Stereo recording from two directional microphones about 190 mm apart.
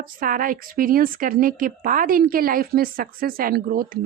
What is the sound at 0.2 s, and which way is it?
Speech, 45° right (ahead or behind).